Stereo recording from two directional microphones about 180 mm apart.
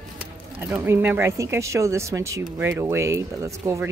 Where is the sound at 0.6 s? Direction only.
15° right (ahead or behind).